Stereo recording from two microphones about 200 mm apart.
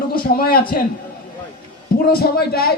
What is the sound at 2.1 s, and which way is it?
Speech, 50° left (ahead or behind).